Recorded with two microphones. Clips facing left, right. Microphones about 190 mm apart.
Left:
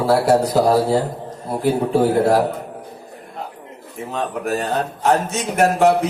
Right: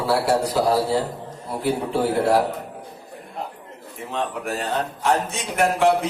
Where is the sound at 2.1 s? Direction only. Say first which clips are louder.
Even; 40° left (ahead or behind).